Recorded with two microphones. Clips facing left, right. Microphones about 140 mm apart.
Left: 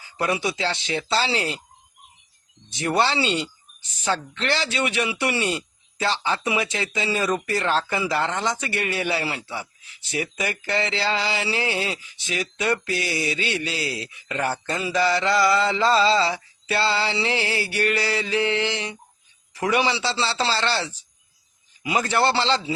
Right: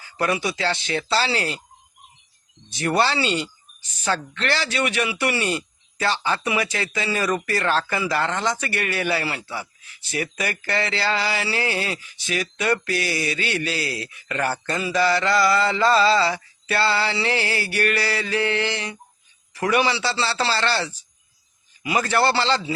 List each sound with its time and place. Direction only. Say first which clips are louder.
0.2 s speech: right 1 dB; 20° left (ahead or behind)
2.7 s speech: right 1 dB; 20° left (ahead or behind)